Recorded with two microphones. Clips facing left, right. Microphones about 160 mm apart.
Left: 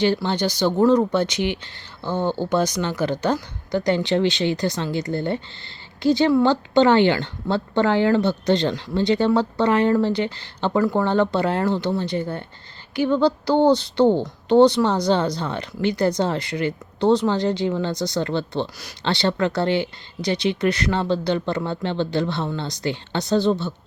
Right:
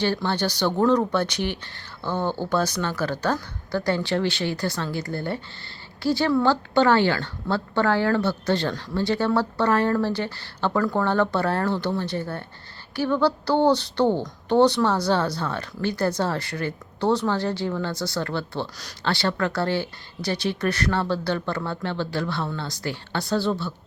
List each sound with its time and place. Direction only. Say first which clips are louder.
0.0 s speech: left 3 dB; 15° left (ahead or behind)